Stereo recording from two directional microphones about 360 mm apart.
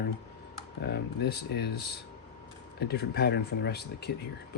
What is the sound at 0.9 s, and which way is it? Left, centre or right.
Speech, left.